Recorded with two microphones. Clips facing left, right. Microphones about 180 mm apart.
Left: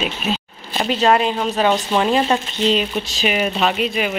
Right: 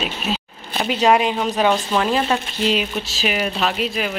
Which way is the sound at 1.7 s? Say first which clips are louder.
Left 1 dB; 15° left (ahead or behind).